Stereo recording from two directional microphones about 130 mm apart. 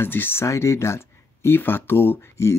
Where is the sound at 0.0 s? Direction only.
15° left (ahead or behind).